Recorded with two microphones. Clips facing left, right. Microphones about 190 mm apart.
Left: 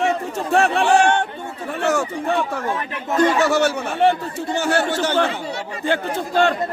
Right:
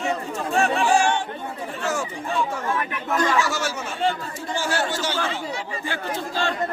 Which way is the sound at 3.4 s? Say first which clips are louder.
Left 9 dB; 60° left (ahead or behind).